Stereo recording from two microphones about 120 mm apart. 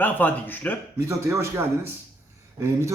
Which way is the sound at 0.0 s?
15° left (ahead or behind).